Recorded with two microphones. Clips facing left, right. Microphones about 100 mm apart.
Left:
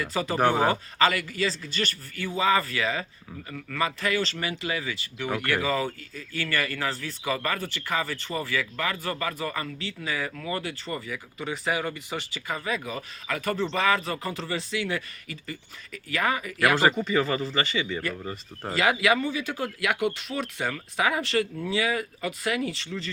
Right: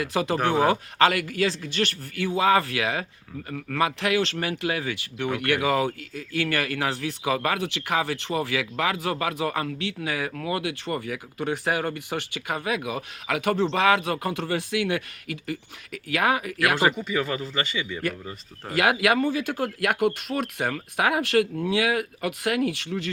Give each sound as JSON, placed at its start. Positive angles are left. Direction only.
{"t": 0.0, "sound": "speech", "side_deg": -65}
{"t": 0.3, "sound": "speech", "side_deg": 5}
{"t": 0.7, "sound": "a man's voice", "side_deg": -65}
{"t": 16.7, "sound": "speech", "side_deg": -5}
{"t": 18.7, "sound": "speech", "side_deg": -60}